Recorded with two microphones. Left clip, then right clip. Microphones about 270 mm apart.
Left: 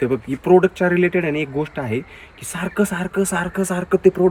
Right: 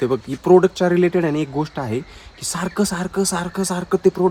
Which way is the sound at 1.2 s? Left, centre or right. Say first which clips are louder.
Even; right.